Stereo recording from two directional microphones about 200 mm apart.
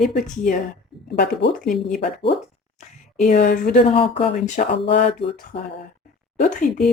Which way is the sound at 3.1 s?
40° left (ahead or behind).